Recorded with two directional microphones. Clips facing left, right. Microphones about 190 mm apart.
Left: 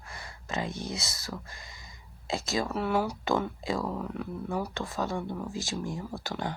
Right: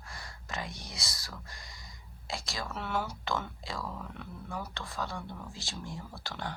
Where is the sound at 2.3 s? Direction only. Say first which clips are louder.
Left 9 dB; 20° left (ahead or behind).